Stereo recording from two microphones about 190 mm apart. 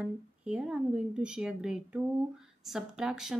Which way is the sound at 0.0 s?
5° right (ahead or behind).